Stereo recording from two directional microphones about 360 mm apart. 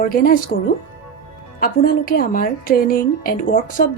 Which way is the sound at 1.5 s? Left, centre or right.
Left.